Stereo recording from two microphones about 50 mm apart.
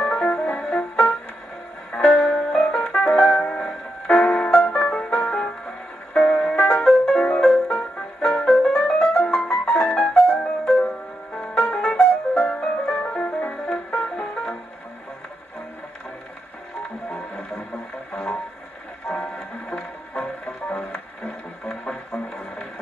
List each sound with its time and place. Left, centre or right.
0.0 s music: left
2.2 s music: centre
3.2 s music: left
4.9 s music: centre
7.7 s music: centre
17.1 s music: centre